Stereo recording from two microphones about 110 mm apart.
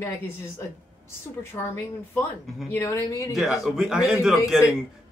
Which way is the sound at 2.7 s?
25° left (ahead or behind).